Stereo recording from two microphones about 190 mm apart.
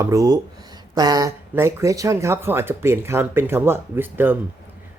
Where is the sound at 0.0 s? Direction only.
15° right (ahead or behind).